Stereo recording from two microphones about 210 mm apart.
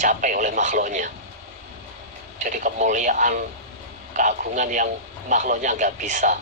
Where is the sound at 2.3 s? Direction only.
40° right (ahead or behind).